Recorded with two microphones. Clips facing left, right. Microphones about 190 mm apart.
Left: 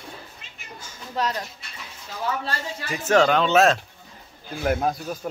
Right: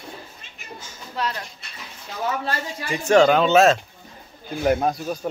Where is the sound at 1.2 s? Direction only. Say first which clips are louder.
Left 2 dB; 40° left (ahead or behind).